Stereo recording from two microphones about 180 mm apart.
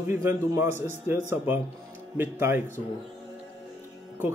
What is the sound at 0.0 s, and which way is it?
Speech, 15° right (ahead or behind).